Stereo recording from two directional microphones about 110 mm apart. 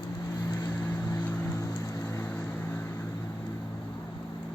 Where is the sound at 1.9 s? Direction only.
25° left (ahead or behind).